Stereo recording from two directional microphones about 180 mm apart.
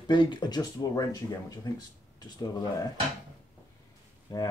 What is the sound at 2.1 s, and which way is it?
Speech, 20° left (ahead or behind).